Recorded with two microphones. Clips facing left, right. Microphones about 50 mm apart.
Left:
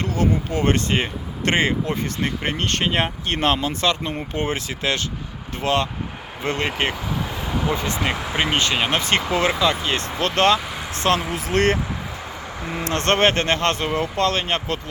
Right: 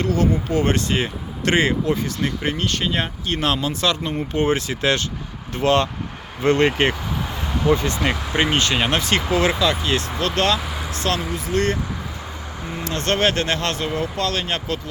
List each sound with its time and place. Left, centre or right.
0.0 s speech: left
2.6 s speech: left
3.4 s speech: left
4.5 s speech: centre
9.0 s speech: centre
10.2 s speech: left
10.6 s vehicle: centre
11.3 s speech: left
12.8 s speech: left
13.5 s speech: left